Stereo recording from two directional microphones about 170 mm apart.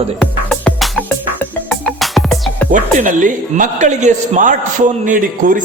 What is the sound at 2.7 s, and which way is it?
A man's voice, 50° right (ahead or behind).